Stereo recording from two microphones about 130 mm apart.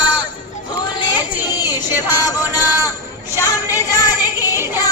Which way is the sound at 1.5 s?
30° left (ahead or behind).